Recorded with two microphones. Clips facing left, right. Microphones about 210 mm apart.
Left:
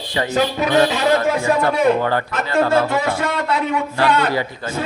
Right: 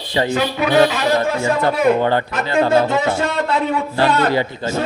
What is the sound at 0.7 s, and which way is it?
Speech, 25° right (ahead or behind).